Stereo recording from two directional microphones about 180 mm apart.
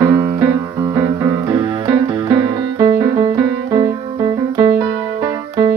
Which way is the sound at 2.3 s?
25° right (ahead or behind).